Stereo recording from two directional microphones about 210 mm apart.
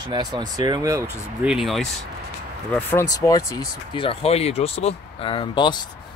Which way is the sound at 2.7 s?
10° left (ahead or behind).